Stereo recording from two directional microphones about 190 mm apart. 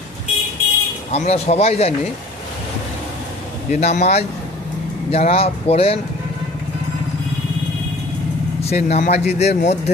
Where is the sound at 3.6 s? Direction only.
40° left (ahead or behind).